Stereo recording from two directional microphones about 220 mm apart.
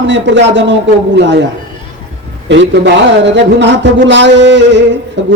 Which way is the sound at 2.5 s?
55° right (ahead or behind).